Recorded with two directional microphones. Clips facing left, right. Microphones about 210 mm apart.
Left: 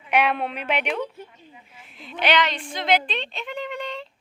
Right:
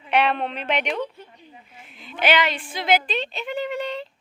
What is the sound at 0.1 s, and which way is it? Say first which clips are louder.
A woman's voice: right 1 dB; 10° left (ahead or behind).